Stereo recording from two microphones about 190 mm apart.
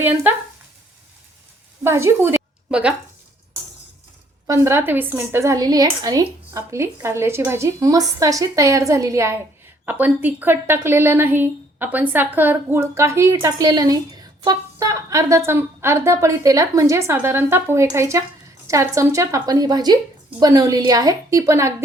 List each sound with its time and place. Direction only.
0.0 s speech: 10° right (ahead or behind)
1.8 s a woman's voice: 15° right (ahead or behind)
4.4 s a woman's voice: 15° right (ahead or behind)